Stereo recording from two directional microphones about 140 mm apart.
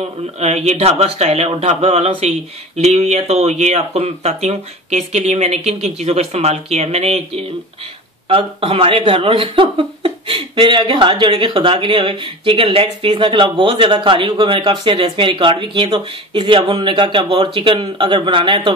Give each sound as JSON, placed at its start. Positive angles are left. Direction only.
{"t": 0.4, "sound": "speech", "side_deg": -55}